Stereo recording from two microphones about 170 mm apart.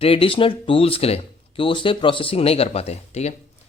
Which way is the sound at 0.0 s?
35° left (ahead or behind).